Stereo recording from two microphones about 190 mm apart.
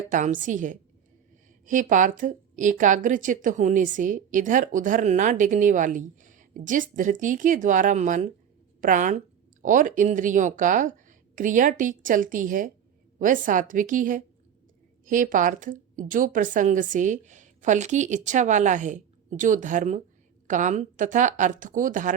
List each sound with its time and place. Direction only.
0.1 s a woman's voice: 40° right (ahead or behind)